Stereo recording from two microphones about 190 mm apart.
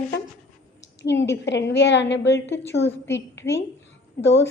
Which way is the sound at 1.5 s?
65° left (ahead or behind).